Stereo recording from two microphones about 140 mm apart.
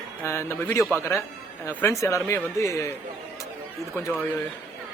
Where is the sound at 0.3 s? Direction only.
20° left (ahead or behind).